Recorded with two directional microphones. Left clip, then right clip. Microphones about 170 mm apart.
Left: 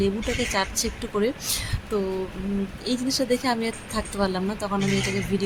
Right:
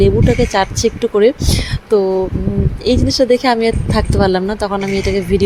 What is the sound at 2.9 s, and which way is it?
Speech, 25° right (ahead or behind).